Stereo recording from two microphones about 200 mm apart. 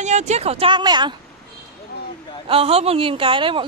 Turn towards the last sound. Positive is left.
turn(degrees=-25)  # may be behind; listen again after turning